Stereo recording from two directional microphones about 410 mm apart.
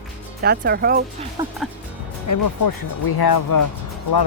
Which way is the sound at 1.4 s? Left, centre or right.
Centre.